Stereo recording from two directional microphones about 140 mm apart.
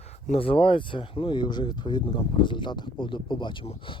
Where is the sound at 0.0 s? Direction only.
50° left (ahead or behind).